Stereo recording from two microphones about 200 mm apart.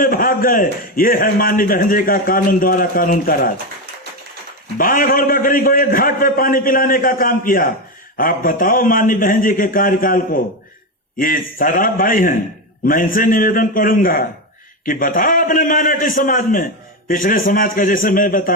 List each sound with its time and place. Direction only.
0.0 s a man's voice: 45° left (ahead or behind)
4.8 s a man's voice: 45° left (ahead or behind)